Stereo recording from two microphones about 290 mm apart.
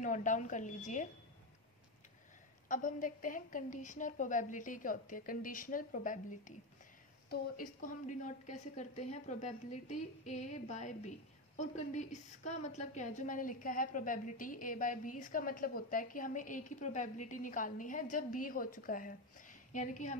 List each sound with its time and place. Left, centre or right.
0.0 s a woman's voice: left
2.7 s a woman's voice: left